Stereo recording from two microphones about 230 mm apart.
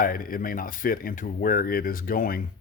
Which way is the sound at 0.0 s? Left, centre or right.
Left.